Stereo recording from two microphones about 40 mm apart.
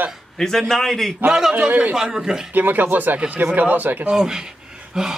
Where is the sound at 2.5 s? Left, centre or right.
Right.